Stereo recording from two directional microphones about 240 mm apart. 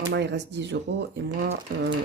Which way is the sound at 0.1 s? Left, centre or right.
Right.